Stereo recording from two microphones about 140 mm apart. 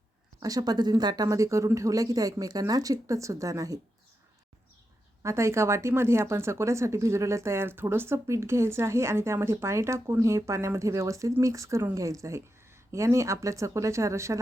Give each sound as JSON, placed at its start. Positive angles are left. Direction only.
{"t": 0.3, "sound": "speech", "side_deg": -25}
{"t": 5.2, "sound": "speech", "side_deg": -20}